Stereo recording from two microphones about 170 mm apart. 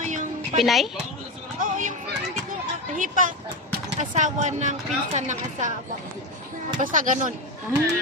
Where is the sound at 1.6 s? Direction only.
50° right (ahead or behind).